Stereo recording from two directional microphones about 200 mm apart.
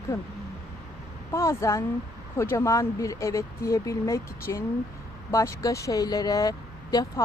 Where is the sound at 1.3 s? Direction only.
15° left (ahead or behind).